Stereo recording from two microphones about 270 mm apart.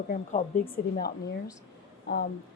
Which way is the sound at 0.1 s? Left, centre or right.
Left.